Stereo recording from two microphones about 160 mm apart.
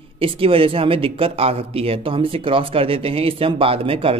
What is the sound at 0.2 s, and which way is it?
A man's voice, 35° right (ahead or behind).